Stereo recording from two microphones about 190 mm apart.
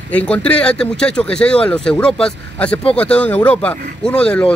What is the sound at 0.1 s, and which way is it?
Speech, 5° left (ahead or behind).